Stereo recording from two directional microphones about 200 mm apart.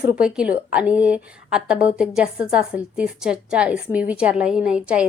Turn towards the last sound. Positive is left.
turn(degrees=-5)  # may be behind; listen again after turning